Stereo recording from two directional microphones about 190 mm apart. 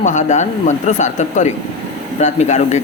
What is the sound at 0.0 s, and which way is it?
Speech, 40° left (ahead or behind).